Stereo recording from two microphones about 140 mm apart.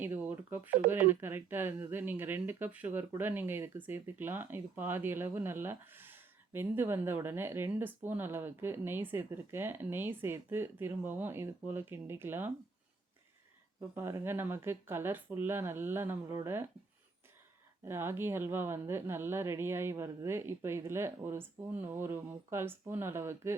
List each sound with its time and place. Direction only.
0.0 s speech: 15° right (ahead or behind)
13.9 s speech: 15° right (ahead or behind)
17.8 s speech: 15° right (ahead or behind)